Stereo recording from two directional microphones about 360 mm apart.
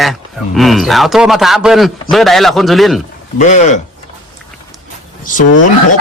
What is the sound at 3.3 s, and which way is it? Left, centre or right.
Speech, centre.